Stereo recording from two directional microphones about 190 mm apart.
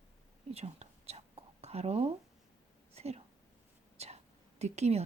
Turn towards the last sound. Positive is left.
turn(degrees=-35)  # may be behind; listen again after turning